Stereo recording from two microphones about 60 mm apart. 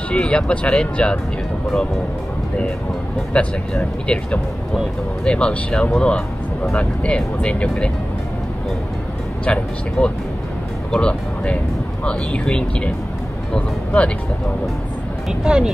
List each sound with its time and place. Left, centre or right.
0.1 s speech: centre
3.3 s speech: centre
5.2 s speech: centre
9.4 s speech: centre
15.2 s speech: centre